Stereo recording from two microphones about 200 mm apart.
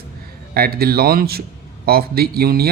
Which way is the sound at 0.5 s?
50° right (ahead or behind).